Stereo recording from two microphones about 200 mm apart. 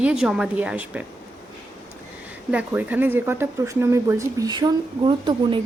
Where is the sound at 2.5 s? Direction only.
10° right (ahead or behind).